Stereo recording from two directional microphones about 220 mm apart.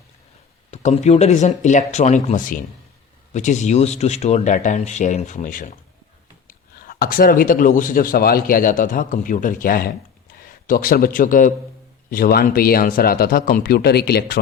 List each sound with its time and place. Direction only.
0.7 s speech: 30° left (ahead or behind)